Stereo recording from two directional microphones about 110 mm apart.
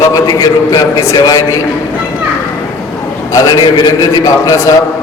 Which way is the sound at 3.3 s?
30° left (ahead or behind).